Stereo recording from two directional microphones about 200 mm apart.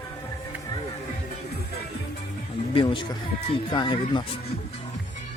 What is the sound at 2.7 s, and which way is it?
Speech, 25° left (ahead or behind).